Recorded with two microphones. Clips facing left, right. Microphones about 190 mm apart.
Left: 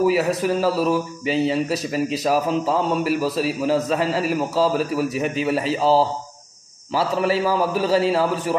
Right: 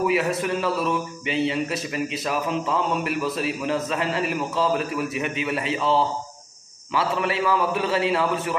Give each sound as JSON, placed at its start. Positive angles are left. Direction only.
{"t": 0.0, "sound": "a man's voice", "side_deg": 40}